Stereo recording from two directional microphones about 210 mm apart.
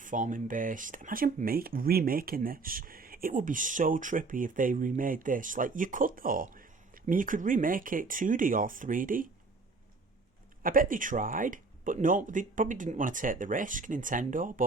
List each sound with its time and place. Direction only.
0.0 s speech: 40° right (ahead or behind)
10.6 s speech: 40° right (ahead or behind)